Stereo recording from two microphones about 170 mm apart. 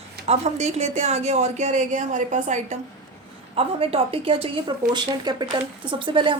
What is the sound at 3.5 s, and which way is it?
A woman's voice, 35° right (ahead or behind).